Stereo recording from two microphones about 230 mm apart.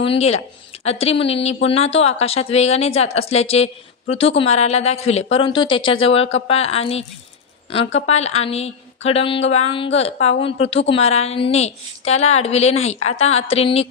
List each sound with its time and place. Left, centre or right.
0.0 s a woman's voice: left